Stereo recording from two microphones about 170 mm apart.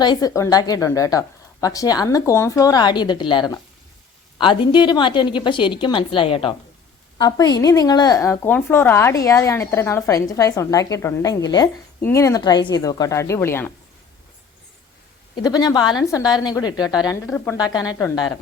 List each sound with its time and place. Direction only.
0.0 s a woman's voice: 25° left (ahead or behind)
15.4 s a woman's voice: 25° left (ahead or behind)
17.3 s speech: 10° left (ahead or behind)
17.6 s a woman's voice: 25° left (ahead or behind)